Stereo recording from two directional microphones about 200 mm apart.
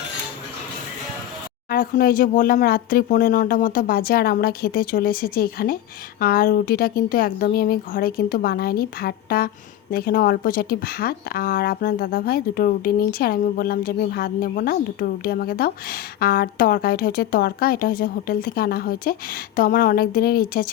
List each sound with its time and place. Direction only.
1.7 s a woman's voice: 45° left (ahead or behind)